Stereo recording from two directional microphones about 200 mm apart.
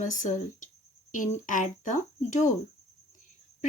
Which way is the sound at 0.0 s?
40° left (ahead or behind).